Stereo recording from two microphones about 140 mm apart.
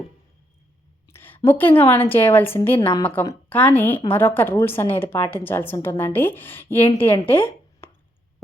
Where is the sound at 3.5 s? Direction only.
10° left (ahead or behind).